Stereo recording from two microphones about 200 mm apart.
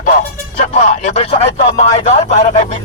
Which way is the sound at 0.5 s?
35° left (ahead or behind).